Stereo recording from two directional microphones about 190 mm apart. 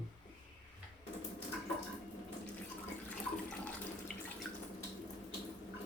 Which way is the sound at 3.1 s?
5° left (ahead or behind).